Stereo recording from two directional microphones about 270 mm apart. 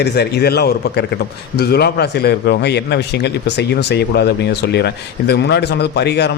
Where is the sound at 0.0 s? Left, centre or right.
Left.